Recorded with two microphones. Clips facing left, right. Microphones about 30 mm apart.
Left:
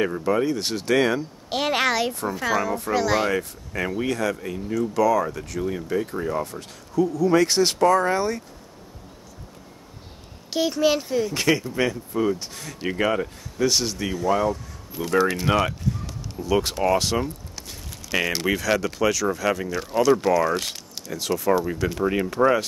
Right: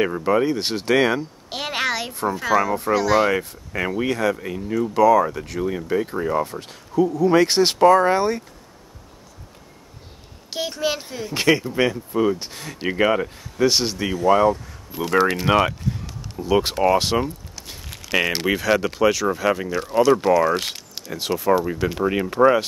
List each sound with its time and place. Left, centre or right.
0.1 s speech: right
1.5 s a woman's voice: centre
3.3 s speech: right
10.5 s a woman's voice: centre
11.3 s speech: right
14.5 s speech: right
17.8 s a sound: right
18.1 s speech: right
20.5 s speech: right
21.5 s speech: centre
21.7 s speech: right